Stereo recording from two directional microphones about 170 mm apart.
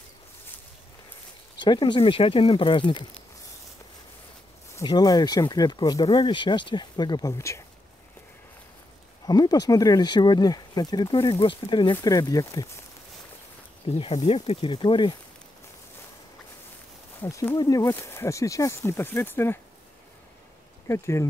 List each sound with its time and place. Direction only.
1.6 s speech: 25° left (ahead or behind)
4.7 s speech: 20° left (ahead or behind)
9.2 s speech: 25° left (ahead or behind)
13.8 s speech: 35° left (ahead or behind)
17.2 s speech: 15° left (ahead or behind)
20.9 s speech: 15° left (ahead or behind)